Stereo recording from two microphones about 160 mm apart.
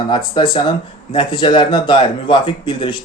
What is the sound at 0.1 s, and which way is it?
Speech, 30° left (ahead or behind).